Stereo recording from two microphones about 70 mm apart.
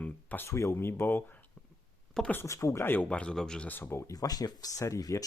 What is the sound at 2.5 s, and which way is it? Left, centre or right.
Speech, left.